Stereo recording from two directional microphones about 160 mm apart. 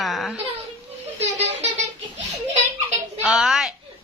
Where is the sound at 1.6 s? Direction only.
45° right (ahead or behind).